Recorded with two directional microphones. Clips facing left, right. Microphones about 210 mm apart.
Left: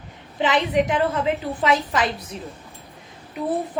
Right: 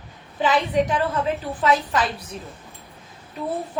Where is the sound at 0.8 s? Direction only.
20° left (ahead or behind).